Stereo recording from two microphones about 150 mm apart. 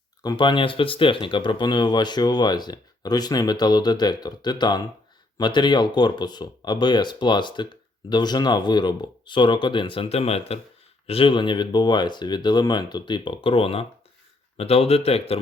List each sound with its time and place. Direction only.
0.2 s speech: 30° left (ahead or behind)